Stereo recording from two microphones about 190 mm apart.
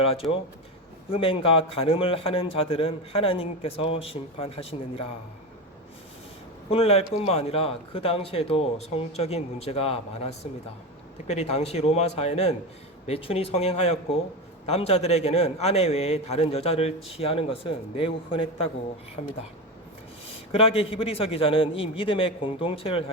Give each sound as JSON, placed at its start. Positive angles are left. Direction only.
{"t": 0.0, "sound": "a man's voice", "side_deg": 30}
{"t": 6.7, "sound": "a man's voice", "side_deg": 30}
{"t": 20.5, "sound": "a man's voice", "side_deg": 30}